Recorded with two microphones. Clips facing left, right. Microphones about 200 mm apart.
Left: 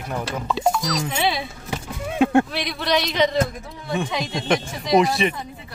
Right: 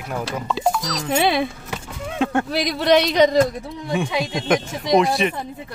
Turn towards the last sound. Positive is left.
turn(degrees=0)  # may be behind; listen again after turning